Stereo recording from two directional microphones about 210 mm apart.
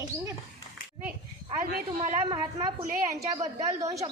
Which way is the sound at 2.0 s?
30° right (ahead or behind).